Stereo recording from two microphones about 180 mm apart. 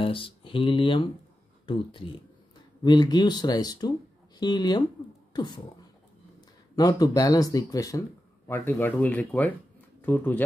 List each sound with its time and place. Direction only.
0.0 s speech: 30° left (ahead or behind)
6.7 s speech: 20° left (ahead or behind)